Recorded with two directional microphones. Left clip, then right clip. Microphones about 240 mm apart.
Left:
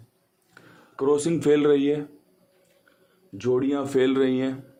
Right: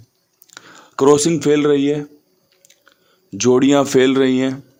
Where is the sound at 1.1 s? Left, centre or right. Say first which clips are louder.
Right 6 dB; right.